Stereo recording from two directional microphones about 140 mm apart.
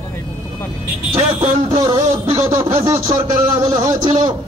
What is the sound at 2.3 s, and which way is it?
Music, 20° right (ahead or behind).